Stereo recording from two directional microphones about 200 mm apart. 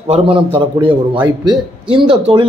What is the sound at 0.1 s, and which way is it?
A man's voice, 25° right (ahead or behind).